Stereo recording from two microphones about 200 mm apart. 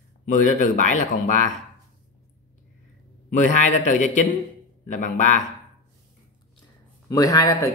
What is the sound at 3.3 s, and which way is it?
Speech, 40° left (ahead or behind).